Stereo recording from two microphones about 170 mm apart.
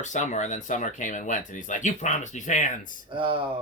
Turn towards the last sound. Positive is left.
turn(degrees=-30)  # may be behind; listen again after turning